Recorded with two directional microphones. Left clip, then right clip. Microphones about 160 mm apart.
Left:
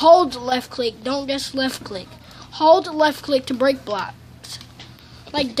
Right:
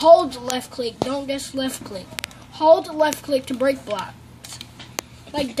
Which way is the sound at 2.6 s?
Centre (ahead or behind).